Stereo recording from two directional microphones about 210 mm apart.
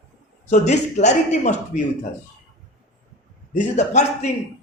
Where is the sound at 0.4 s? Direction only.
35° left (ahead or behind).